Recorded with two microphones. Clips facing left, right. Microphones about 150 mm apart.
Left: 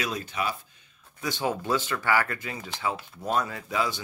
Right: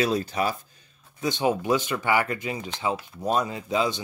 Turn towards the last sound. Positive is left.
turn(degrees=-20)  # may be behind; listen again after turning